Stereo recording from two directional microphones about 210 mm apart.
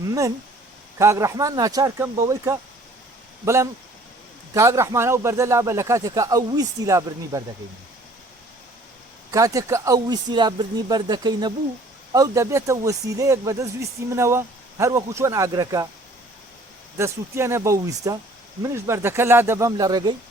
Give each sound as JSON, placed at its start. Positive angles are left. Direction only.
{"t": 0.9, "sound": "speech", "side_deg": -15}
{"t": 9.3, "sound": "speech", "side_deg": -15}
{"t": 17.0, "sound": "speech", "side_deg": -15}